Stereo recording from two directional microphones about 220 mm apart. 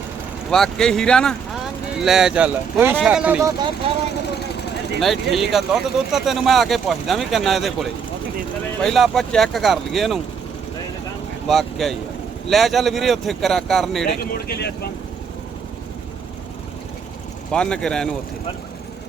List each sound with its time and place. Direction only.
0.5 s speech: centre (ahead or behind)
4.9 s speech: centre (ahead or behind)
11.4 s speech: centre (ahead or behind)
14.2 s speech: 45° left (ahead or behind)
17.5 s speech: 5° left (ahead or behind)